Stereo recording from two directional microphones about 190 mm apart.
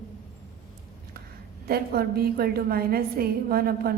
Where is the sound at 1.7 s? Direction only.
55° right (ahead or behind).